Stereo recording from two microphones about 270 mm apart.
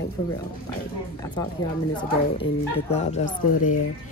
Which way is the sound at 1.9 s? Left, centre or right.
Centre.